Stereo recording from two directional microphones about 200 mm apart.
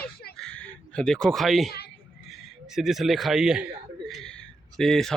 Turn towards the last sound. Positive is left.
turn(degrees=0)  # may be behind; listen again after turning